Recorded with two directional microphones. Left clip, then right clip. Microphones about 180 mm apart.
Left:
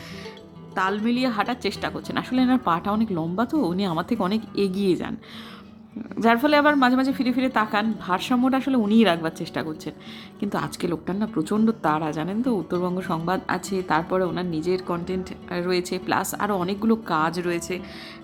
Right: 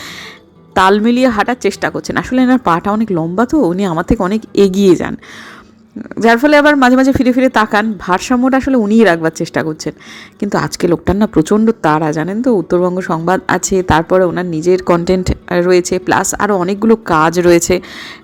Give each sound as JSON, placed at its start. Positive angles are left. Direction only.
{"t": 0.7, "sound": "speech", "side_deg": -45}
{"t": 6.1, "sound": "speech", "side_deg": -25}
{"t": 15.0, "sound": "speech", "side_deg": -45}
{"t": 17.4, "sound": "speech", "side_deg": -45}